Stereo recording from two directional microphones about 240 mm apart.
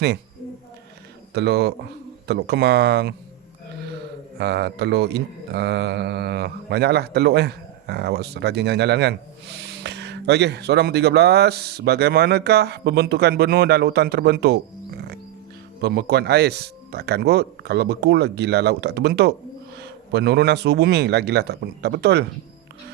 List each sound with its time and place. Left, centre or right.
1.3 s speech: right
4.4 s speech: right